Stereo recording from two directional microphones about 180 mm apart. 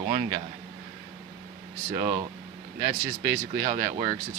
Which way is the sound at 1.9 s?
20° right (ahead or behind).